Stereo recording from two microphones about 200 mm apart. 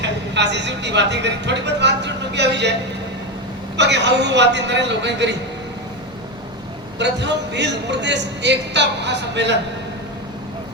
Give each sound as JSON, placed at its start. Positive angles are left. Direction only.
{"t": 0.0, "sound": "speech", "side_deg": -60}
{"t": 3.8, "sound": "speech", "side_deg": -60}
{"t": 7.0, "sound": "speech", "side_deg": -60}